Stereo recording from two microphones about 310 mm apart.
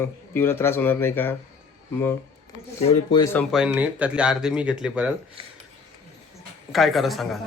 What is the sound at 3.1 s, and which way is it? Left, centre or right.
Speech, centre.